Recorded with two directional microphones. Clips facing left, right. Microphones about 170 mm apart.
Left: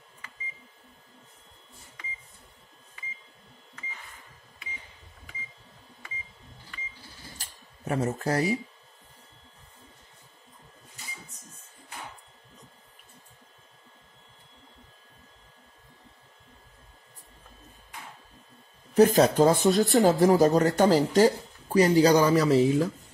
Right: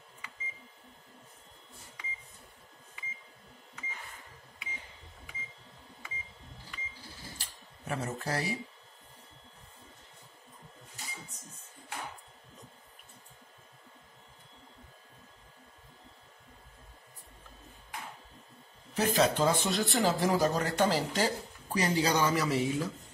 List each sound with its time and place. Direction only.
7.3 s a sound: 40° left (ahead or behind)
18.9 s speech: 45° left (ahead or behind)
19.7 s speech: centre (ahead or behind)
20.4 s speech: 45° left (ahead or behind)